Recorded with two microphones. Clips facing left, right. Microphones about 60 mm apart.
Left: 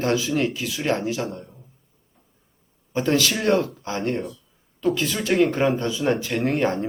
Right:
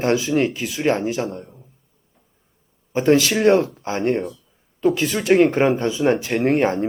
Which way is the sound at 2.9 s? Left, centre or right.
Right.